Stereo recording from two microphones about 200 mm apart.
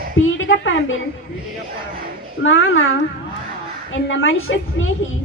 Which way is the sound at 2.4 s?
80° left.